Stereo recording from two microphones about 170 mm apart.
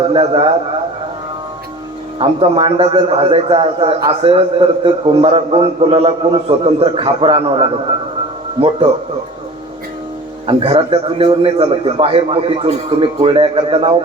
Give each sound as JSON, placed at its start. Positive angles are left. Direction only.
{"t": 0.1, "sound": "a man's voice", "side_deg": -35}
{"t": 2.1, "sound": "a man's voice", "side_deg": -30}
{"t": 10.4, "sound": "a man's voice", "side_deg": -30}